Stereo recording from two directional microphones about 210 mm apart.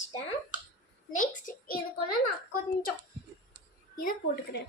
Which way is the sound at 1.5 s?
45° left (ahead or behind).